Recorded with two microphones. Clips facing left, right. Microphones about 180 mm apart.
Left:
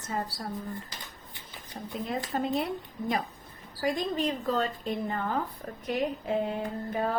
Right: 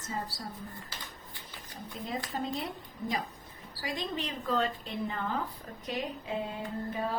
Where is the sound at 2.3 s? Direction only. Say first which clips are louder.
Left 6 dB; 60° left (ahead or behind).